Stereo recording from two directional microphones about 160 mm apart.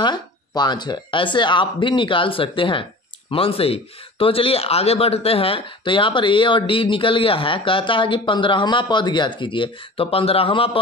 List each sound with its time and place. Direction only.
0.0 s speech: 25° left (ahead or behind)